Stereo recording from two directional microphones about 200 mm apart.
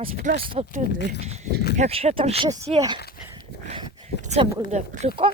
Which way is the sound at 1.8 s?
30° right (ahead or behind).